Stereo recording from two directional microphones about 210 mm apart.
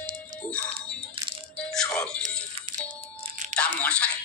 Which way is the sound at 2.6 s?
25° right (ahead or behind).